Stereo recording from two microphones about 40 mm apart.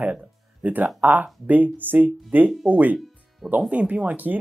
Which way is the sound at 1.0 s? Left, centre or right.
Right.